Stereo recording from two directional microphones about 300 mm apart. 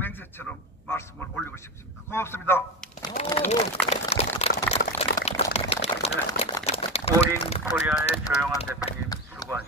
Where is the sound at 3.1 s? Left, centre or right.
Left.